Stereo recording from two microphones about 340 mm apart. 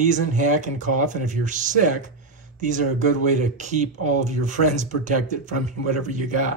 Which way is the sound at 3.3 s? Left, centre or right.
Right.